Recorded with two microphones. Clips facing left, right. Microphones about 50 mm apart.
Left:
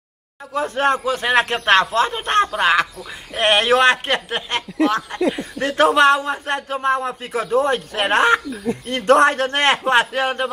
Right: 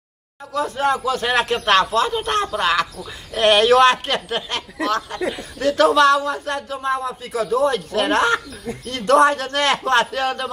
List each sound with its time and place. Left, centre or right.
0.7 s a man's voice: left
1.0 s speech: left